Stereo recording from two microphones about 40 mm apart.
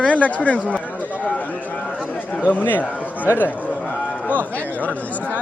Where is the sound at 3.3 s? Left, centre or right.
Left.